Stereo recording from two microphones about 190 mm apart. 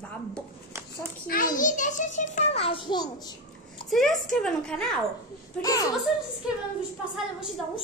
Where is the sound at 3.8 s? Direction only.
Centre (ahead or behind).